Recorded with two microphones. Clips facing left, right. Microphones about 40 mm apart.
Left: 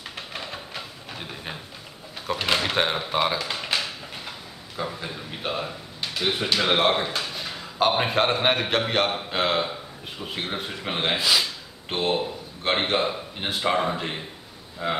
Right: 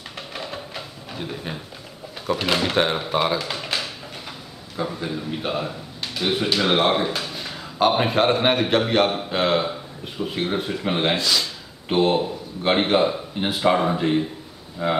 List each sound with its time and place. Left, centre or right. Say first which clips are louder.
0.3 s a sound: right 4 dB; centre
2.2 s a man's voice: right 2 dB; centre
11.1 s speech: even; centre
11.9 s a man's voice: right 6 dB; centre